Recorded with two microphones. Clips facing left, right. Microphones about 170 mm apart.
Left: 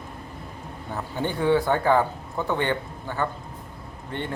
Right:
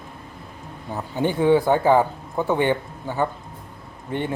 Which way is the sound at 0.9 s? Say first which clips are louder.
Right 5 dB; 15° right (ahead or behind).